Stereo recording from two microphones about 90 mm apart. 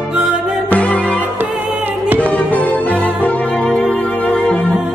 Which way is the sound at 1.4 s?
20° right (ahead or behind).